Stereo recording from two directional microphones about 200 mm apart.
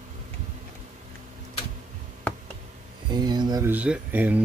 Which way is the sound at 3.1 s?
20° right (ahead or behind).